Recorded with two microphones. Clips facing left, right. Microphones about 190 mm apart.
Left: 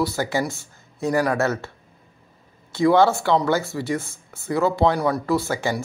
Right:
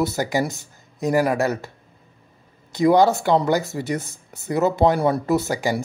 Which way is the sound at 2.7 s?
20° right (ahead or behind).